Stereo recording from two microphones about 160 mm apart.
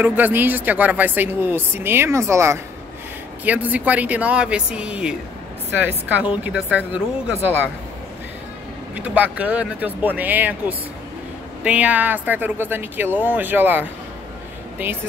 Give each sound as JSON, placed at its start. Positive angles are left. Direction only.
{"t": 0.0, "sound": "a woman's voice", "side_deg": -10}
{"t": 8.9, "sound": "a woman's voice", "side_deg": -10}